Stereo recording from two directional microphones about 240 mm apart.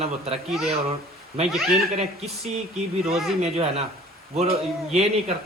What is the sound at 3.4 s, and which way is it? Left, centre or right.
Speech, right.